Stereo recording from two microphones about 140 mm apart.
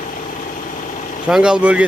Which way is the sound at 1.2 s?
5° right (ahead or behind).